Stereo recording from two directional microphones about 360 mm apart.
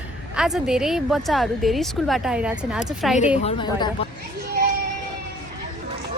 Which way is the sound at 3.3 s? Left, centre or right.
Centre.